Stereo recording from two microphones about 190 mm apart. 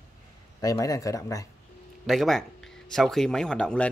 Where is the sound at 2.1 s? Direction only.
Centre (ahead or behind).